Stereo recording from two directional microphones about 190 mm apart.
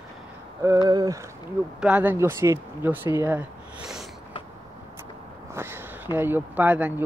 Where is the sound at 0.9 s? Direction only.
20° right (ahead or behind).